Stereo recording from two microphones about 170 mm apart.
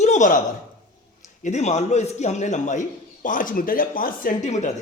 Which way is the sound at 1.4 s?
40° left (ahead or behind).